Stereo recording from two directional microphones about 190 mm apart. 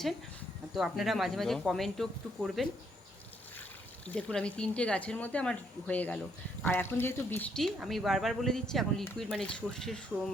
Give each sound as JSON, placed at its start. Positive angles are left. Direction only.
{"t": 0.7, "sound": "speech", "side_deg": 0}
{"t": 4.0, "sound": "speech", "side_deg": 5}